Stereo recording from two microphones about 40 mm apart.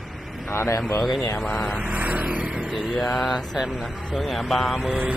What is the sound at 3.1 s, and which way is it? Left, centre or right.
Mantra, centre.